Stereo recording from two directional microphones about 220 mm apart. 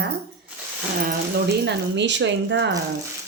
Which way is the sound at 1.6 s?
55° right (ahead or behind).